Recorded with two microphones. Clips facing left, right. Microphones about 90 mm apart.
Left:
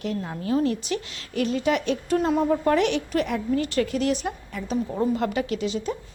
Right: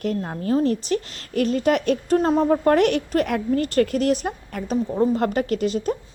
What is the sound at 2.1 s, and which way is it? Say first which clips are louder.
Speech: right 3 dB; 35° right (ahead or behind).